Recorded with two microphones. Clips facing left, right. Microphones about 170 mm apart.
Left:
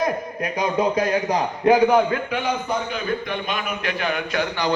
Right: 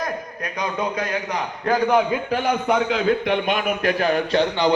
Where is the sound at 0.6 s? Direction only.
30° left (ahead or behind).